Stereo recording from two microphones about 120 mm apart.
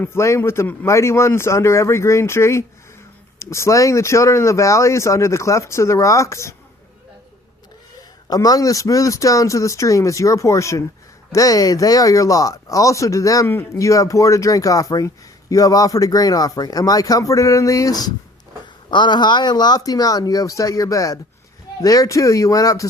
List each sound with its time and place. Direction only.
0.0 s speech: 20° left (ahead or behind)
8.3 s speech: 30° left (ahead or behind)